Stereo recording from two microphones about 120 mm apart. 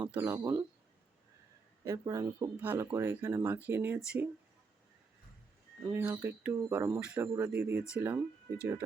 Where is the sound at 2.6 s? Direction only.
15° right (ahead or behind).